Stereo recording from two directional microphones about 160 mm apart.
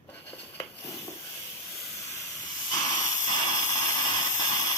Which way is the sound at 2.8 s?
25° left (ahead or behind).